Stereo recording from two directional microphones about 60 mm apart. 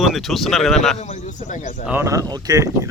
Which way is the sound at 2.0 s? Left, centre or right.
Right.